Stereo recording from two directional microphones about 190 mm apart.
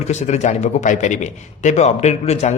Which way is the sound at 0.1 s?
40° left (ahead or behind).